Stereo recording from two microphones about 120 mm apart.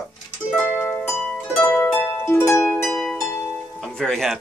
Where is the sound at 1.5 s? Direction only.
10° left (ahead or behind).